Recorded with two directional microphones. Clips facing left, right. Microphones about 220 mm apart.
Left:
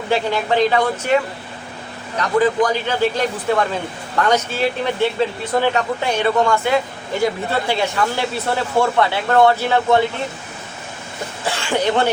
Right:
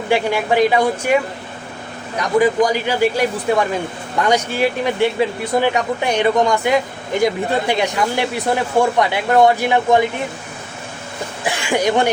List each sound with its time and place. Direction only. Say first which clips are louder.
0.1 s speech: right 2 dB; 10° right (ahead or behind)
11.4 s speech: right 2 dB; 15° right (ahead or behind)